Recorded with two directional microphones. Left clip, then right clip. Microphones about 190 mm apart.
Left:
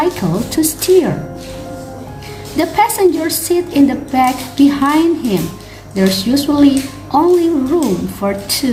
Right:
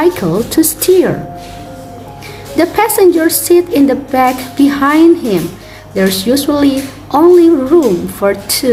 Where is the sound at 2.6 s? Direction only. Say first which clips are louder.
Right 3 dB; 25° right (ahead or behind).